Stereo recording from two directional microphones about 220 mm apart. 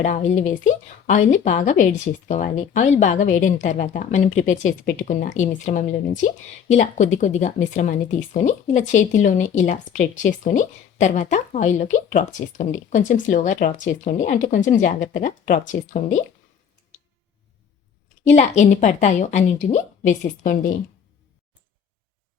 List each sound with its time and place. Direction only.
0.0 s speech: 35° left (ahead or behind)
18.3 s speech: 30° left (ahead or behind)